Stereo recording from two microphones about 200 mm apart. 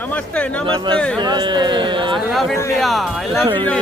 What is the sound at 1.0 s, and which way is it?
Speech, 5° left (ahead or behind).